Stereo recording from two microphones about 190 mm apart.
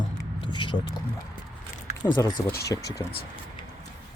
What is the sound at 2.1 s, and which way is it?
Speech, 20° left (ahead or behind).